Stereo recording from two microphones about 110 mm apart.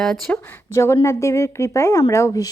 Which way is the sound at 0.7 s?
25° left (ahead or behind).